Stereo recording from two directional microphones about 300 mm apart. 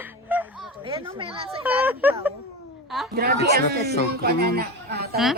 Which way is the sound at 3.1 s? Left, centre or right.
Right.